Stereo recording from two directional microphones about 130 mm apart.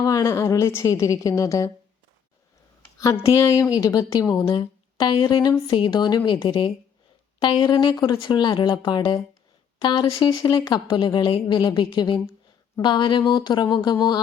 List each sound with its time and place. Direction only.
0.0 s a woman's voice: 25° left (ahead or behind)
3.0 s a woman's voice: 25° left (ahead or behind)
4.6 s a sound: 30° left (ahead or behind)
5.2 s a woman's voice: 30° left (ahead or behind)